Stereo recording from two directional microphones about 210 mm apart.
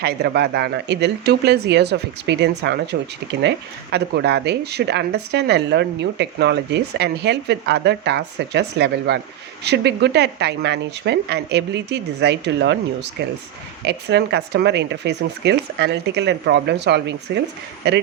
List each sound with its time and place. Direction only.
0.0 s speech: 50° right (ahead or behind)